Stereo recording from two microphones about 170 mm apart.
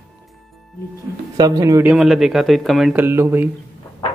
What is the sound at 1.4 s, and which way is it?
Speech, 20° right (ahead or behind).